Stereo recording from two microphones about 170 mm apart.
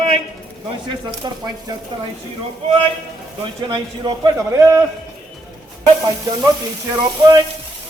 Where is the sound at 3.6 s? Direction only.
25° right (ahead or behind).